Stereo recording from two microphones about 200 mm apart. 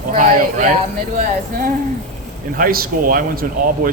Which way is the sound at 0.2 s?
45° right (ahead or behind).